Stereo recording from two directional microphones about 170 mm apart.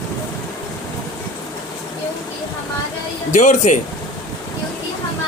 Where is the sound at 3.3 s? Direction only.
45° left (ahead or behind).